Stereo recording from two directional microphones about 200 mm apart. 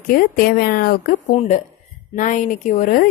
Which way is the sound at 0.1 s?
45° left (ahead or behind).